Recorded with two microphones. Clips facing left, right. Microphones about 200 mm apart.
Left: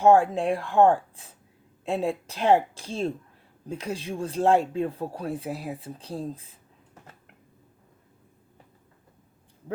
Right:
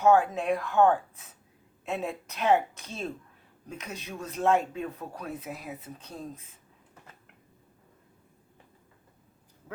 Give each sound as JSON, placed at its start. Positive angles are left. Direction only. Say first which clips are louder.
{"t": 0.0, "sound": "speech", "louder": "left 4 dB", "side_deg": 30}